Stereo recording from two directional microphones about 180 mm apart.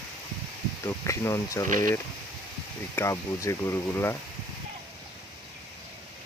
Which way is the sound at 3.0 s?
15° left (ahead or behind).